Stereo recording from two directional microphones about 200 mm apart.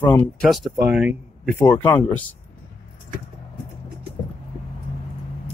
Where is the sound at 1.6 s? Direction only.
15° left (ahead or behind).